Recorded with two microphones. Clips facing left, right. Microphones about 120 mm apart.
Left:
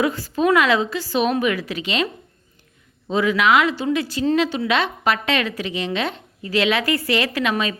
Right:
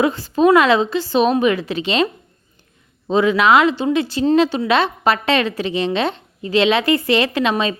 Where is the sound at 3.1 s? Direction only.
30° right (ahead or behind).